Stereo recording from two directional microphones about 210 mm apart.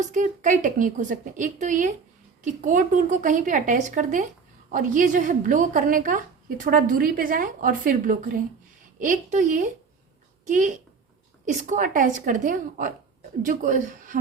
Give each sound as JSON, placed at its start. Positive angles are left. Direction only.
{"t": 0.0, "sound": "a woman's voice", "side_deg": -35}